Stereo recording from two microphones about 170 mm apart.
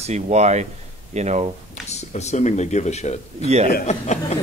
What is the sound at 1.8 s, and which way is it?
Speech, 40° left (ahead or behind).